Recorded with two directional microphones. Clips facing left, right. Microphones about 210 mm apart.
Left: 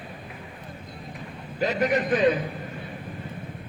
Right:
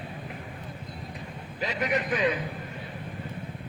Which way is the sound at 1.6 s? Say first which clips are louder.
Left 5 dB; 45° left (ahead or behind).